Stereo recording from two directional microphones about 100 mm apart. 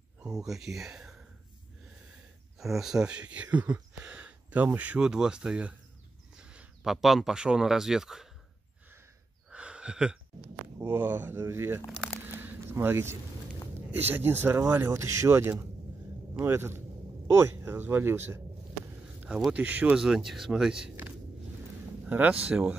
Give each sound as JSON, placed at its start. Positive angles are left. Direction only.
{"t": 0.2, "sound": "speech", "side_deg": -5}
{"t": 2.6, "sound": "speech", "side_deg": -5}
{"t": 9.5, "sound": "a sound", "side_deg": -10}
{"t": 10.8, "sound": "speech", "side_deg": -25}
{"t": 12.4, "sound": "a sound", "side_deg": -20}
{"t": 13.7, "sound": "speech", "side_deg": -20}
{"t": 19.2, "sound": "speech", "side_deg": -10}
{"t": 22.0, "sound": "speech", "side_deg": -15}